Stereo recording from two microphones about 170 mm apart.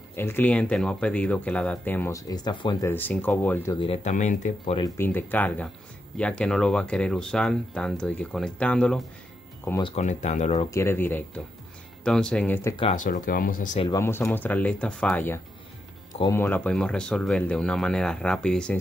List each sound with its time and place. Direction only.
0.1 s speech: 15° left (ahead or behind)
2.9 s speech: 10° left (ahead or behind)
3.7 s speech: 30° left (ahead or behind)
4.0 s speech: 45° left (ahead or behind)
4.7 s speech: 20° left (ahead or behind)
9.9 s speech: 45° left (ahead or behind)
10.7 s speech: 15° left (ahead or behind)
12.9 s speech: 50° left (ahead or behind)
13.9 s speech: 15° left (ahead or behind)